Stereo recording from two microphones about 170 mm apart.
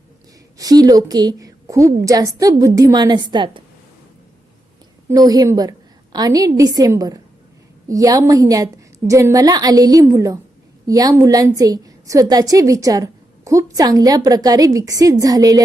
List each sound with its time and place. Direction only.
0.6 s a woman's voice: 20° right (ahead or behind)
5.0 s a woman's voice: 20° right (ahead or behind)